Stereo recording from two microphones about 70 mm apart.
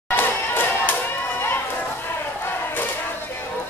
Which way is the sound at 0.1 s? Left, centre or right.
Left.